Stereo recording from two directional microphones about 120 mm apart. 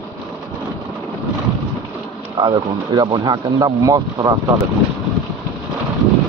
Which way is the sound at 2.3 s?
40° right (ahead or behind).